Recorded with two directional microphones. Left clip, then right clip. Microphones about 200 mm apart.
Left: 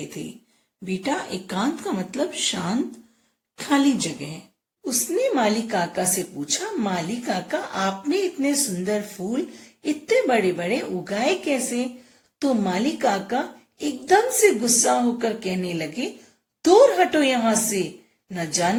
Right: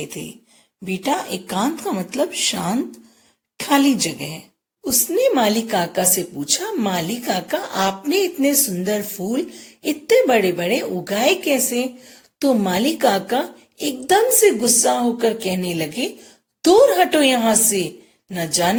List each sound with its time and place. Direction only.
0.9 s a woman's voice: 30° right (ahead or behind)